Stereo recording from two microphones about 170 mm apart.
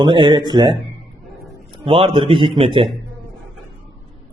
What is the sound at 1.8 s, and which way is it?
A man's voice, 35° right (ahead or behind).